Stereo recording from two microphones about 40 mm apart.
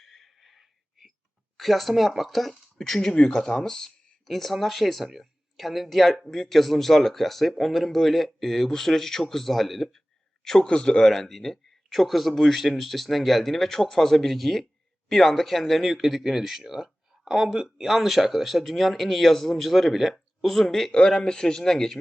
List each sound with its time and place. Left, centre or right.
0.0 s a sound: centre
1.5 s speech: centre
2.7 s speech: centre